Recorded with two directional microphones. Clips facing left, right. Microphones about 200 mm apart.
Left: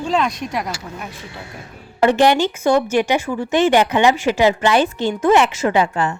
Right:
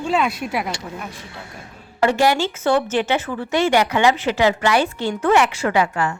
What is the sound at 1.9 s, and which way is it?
Speech, 20° left (ahead or behind).